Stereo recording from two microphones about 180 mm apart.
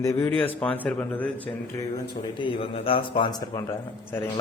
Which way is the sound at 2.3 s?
30° left (ahead or behind).